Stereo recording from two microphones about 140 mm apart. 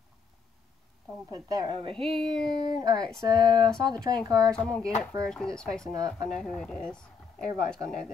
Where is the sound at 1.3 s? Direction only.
30° right (ahead or behind).